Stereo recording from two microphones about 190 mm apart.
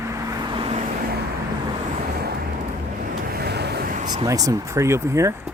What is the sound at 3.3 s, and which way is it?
Vehicle, 55° right (ahead or behind).